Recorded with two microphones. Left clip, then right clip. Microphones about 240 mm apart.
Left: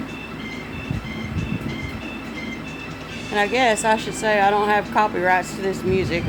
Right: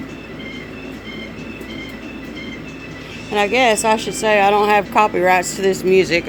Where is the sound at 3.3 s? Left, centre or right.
Right.